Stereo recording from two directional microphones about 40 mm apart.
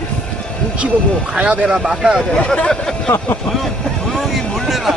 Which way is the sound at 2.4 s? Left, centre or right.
Left.